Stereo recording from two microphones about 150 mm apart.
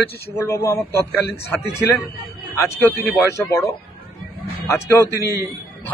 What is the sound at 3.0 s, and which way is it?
Speech, 15° left (ahead or behind).